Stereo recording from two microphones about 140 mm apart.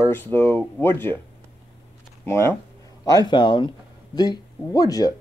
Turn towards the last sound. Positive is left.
turn(degrees=25)  # may be behind; listen again after turning